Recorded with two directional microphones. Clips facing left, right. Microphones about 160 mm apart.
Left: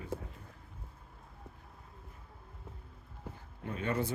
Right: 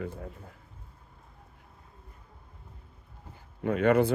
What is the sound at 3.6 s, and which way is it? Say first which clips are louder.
Speech: right 11 dB; 70° right (ahead or behind).